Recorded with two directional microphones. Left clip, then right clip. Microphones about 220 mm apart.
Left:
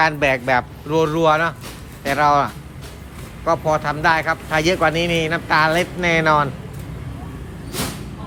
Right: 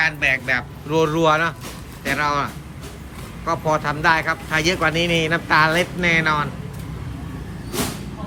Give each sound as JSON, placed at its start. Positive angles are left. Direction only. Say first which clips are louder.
{"t": 0.0, "sound": "a man's voice", "louder": "left 2 dB", "side_deg": 15}
{"t": 0.9, "sound": "a man's voice", "louder": "even", "side_deg": 5}